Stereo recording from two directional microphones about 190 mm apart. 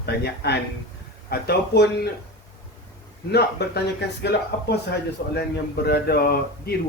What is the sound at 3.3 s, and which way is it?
Speech, 60° left (ahead or behind).